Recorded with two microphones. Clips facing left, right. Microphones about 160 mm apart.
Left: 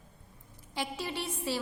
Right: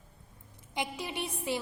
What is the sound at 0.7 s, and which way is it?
Speech, 15° right (ahead or behind).